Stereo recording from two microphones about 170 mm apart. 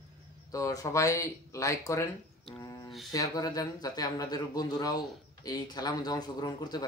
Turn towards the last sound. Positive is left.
turn(degrees=25)  # may be behind; listen again after turning